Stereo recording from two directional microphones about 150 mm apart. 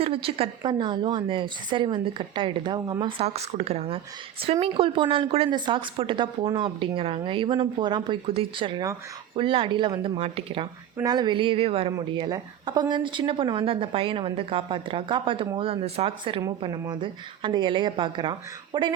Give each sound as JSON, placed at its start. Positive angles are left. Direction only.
{"t": 0.0, "sound": "speech", "side_deg": -40}
{"t": 10.9, "sound": "speech", "side_deg": -25}
{"t": 11.9, "sound": "speech", "side_deg": -25}